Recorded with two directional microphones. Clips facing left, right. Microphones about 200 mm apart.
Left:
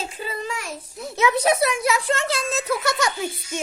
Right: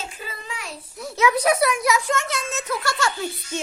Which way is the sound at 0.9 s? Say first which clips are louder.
Even; 25° left (ahead or behind).